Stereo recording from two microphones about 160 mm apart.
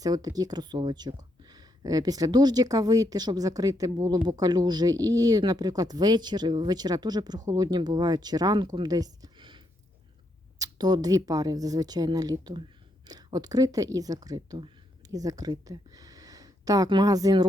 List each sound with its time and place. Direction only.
0.0 s speech: 25° right (ahead or behind)